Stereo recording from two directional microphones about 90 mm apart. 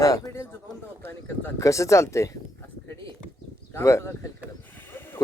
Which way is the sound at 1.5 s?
35° left (ahead or behind).